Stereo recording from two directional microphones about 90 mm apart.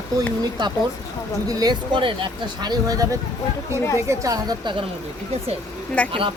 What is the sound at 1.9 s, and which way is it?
Speech, 70° right (ahead or behind).